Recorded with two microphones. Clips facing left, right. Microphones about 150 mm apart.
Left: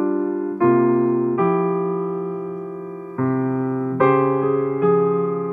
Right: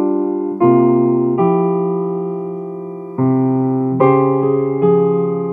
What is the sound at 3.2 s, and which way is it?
Electric piano, 35° right (ahead or behind).